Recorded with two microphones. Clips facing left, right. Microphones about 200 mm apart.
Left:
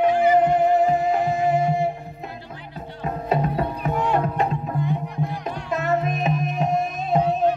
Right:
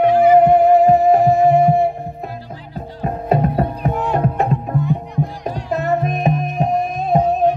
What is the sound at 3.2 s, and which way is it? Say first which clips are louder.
Music: right 5 dB; 55° right (ahead or behind).